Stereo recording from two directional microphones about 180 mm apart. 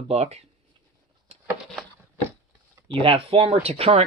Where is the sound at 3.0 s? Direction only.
30° right (ahead or behind).